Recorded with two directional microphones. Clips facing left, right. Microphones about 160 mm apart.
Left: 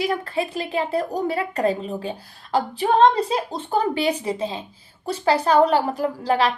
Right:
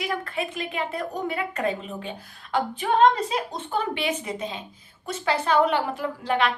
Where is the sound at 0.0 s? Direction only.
30° left (ahead or behind).